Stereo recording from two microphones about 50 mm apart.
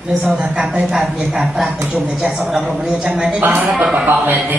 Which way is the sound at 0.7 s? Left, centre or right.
Centre.